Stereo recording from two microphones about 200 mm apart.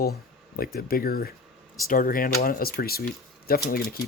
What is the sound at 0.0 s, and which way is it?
Speech, 50° left (ahead or behind).